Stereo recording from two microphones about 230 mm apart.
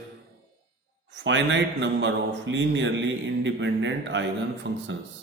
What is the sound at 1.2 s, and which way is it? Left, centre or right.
Speech, right.